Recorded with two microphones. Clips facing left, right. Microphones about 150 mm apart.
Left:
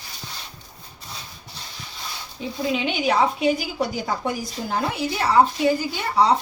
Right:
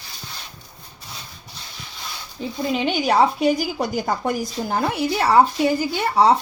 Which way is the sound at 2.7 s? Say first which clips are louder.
Right 4 dB; 40° right (ahead or behind).